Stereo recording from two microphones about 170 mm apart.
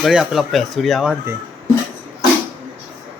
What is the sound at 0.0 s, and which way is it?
A man's voice, centre (ahead or behind).